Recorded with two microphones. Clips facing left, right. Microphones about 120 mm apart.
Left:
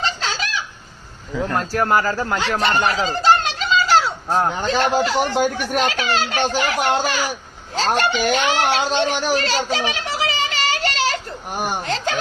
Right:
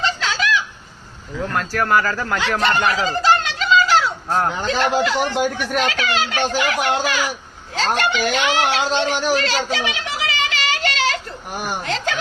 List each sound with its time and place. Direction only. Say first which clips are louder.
0.0 s chicken: right 3 dB; 35° left (ahead or behind)
1.5 s speech: even; 30° left (ahead or behind)
9.3 s children playing: even; 35° left (ahead or behind)